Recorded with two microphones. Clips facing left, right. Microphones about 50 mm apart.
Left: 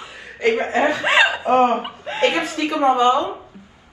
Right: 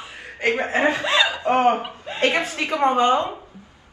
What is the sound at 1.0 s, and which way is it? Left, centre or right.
Chuckle, left.